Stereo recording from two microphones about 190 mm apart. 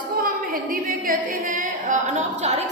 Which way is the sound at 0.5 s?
50° right (ahead or behind).